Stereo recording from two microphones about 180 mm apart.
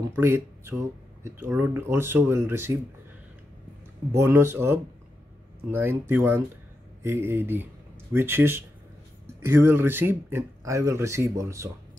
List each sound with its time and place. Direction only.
0.1 s speech: 10° right (ahead or behind)
4.1 s speech: 15° right (ahead or behind)